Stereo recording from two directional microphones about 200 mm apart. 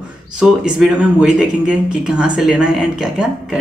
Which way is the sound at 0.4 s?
5° right (ahead or behind).